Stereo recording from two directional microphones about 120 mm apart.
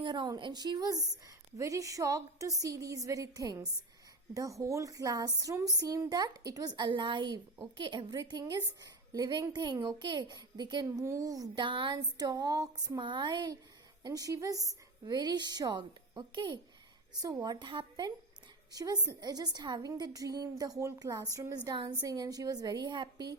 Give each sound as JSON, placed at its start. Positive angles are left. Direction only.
{"t": 0.0, "sound": "a woman's voice", "side_deg": -40}
{"t": 6.7, "sound": "a woman's voice", "side_deg": -40}
{"t": 11.0, "sound": "a woman's voice", "side_deg": -25}